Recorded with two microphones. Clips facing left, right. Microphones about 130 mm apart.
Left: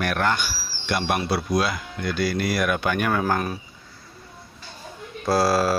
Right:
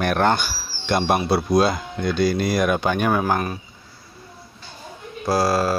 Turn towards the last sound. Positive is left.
turn(degrees=5)  # may be behind; listen again after turning